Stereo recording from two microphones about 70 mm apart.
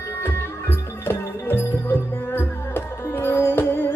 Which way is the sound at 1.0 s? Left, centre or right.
Left.